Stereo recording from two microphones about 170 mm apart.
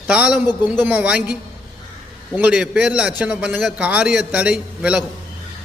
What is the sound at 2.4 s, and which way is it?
A man's voice, 5° right (ahead or behind).